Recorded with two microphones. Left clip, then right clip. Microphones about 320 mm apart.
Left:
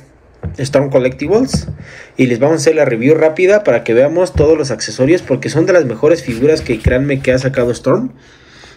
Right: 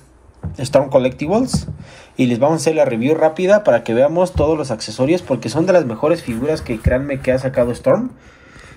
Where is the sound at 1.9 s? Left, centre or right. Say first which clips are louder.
Left 5 dB; right.